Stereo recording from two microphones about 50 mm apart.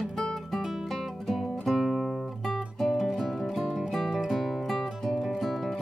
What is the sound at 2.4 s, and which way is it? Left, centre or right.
Music, centre.